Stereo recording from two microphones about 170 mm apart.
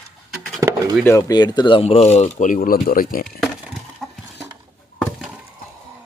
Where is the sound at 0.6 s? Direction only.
20° right (ahead or behind).